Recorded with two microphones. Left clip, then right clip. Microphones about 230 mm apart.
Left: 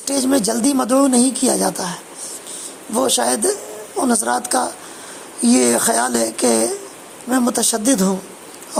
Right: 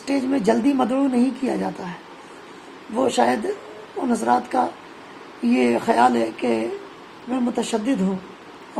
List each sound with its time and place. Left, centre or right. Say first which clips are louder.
0.1 s speech: left 2 dB; left
2.9 s a woman's voice: left 1 dB; left